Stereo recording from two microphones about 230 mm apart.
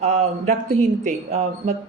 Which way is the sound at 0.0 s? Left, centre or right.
Right.